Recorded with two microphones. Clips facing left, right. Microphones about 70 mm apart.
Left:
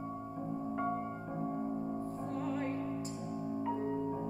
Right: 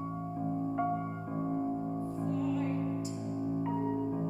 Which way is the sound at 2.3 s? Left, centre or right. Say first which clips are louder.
Right 4 dB; left.